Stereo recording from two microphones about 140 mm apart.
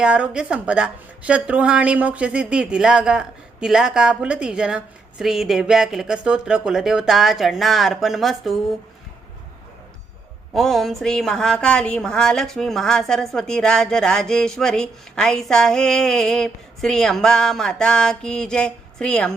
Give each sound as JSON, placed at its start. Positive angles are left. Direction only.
{"t": 0.0, "sound": "a woman's voice", "side_deg": -5}
{"t": 10.5, "sound": "a woman's voice", "side_deg": 0}